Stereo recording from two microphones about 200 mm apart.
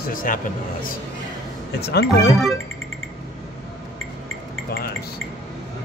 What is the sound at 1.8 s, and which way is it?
Speech, 55° left (ahead or behind).